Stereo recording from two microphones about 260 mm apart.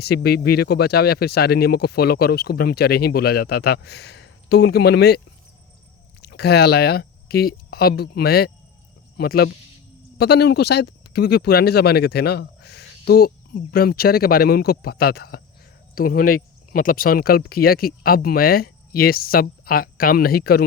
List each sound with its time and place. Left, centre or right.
0.0 s speech: left
6.2 s speech: left